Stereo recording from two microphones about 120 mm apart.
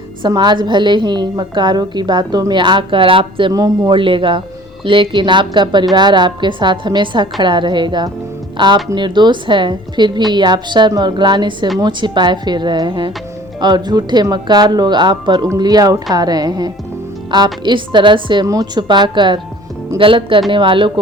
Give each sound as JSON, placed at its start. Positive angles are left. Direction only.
{"t": 0.2, "sound": "a woman's voice", "side_deg": -40}
{"t": 3.5, "sound": "a woman's voice", "side_deg": -30}
{"t": 3.9, "sound": "a woman's voice", "side_deg": -45}